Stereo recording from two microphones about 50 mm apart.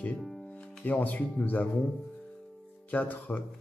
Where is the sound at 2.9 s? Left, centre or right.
Left.